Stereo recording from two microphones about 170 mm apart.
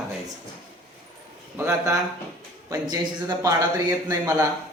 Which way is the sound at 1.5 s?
15° right (ahead or behind).